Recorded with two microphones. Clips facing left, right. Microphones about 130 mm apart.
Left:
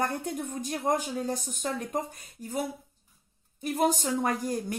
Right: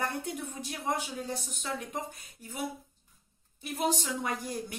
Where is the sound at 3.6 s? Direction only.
45° left (ahead or behind).